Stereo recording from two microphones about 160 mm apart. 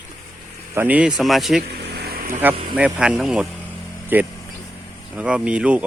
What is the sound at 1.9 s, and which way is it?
Vehicle, 80° right.